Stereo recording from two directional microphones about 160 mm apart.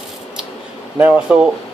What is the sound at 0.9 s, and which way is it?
Speech, 10° right (ahead or behind).